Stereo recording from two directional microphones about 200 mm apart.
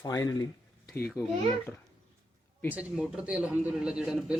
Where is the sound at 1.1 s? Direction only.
5° left (ahead or behind).